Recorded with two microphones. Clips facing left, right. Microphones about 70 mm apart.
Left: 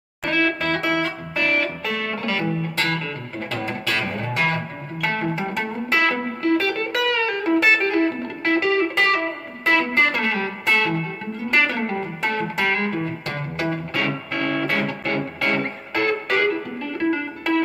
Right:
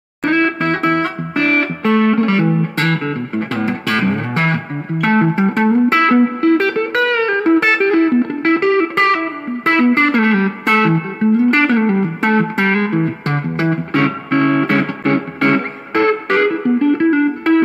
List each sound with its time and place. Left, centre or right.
0.2 s music: right